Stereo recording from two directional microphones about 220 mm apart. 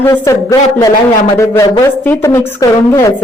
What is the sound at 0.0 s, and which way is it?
Speech, 10° left (ahead or behind).